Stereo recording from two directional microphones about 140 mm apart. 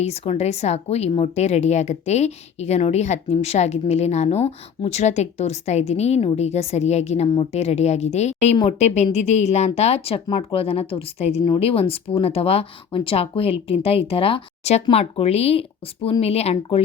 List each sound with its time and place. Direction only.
0.0 s a woman's voice: 50° left (ahead or behind)